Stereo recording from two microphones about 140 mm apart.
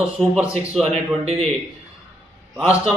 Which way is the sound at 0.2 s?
5° right (ahead or behind).